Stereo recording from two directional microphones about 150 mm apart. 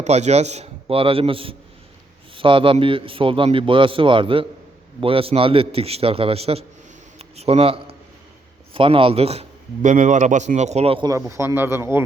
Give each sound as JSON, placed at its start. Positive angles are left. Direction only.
{"t": 0.0, "sound": "a man's voice", "side_deg": -50}
{"t": 11.1, "sound": "speech", "side_deg": -20}